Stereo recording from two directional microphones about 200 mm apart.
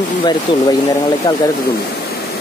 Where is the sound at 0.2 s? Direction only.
20° left (ahead or behind).